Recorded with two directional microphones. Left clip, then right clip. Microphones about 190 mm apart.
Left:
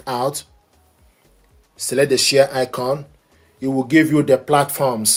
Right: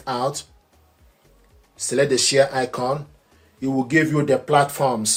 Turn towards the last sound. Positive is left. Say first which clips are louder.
# left 2 dB
turn(degrees=40)  # may be behind; listen again after turning